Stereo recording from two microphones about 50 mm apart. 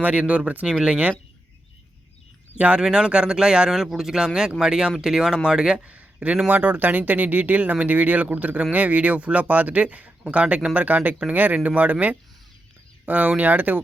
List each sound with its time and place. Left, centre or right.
0.0 s speech: right
2.6 s speech: right
2.8 s speech: centre
5.8 s a sound: right
6.5 s speech: right